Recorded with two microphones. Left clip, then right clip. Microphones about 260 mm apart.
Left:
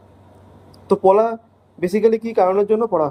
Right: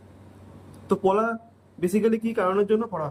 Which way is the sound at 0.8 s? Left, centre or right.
Left.